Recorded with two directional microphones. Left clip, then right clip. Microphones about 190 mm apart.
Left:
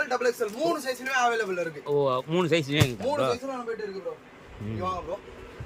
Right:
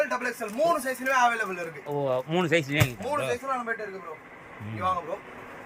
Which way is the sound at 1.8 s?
10° left (ahead or behind).